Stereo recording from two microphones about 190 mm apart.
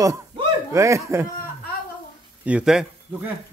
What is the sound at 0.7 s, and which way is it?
Speech, 15° right (ahead or behind).